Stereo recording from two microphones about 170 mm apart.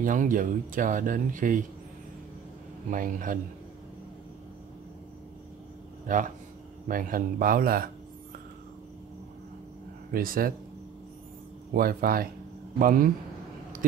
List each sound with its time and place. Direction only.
0.0 s speech: 50° right (ahead or behind)
2.9 s speech: 50° right (ahead or behind)
6.1 s speech: 50° right (ahead or behind)
10.1 s speech: 55° right (ahead or behind)
11.7 s speech: 60° right (ahead or behind)